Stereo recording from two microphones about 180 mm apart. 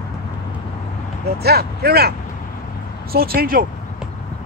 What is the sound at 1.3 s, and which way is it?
Speech, 60° right (ahead or behind).